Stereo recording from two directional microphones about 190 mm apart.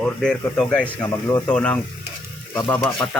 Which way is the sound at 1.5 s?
5° left (ahead or behind).